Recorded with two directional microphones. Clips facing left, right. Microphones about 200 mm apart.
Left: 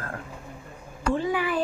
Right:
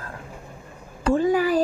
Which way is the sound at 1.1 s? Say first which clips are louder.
Right 7 dB; 45° right (ahead or behind).